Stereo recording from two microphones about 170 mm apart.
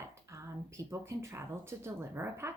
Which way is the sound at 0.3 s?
15° right (ahead or behind).